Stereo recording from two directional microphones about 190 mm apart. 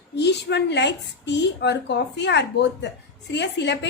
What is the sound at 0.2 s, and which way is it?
A woman's voice, 65° left (ahead or behind).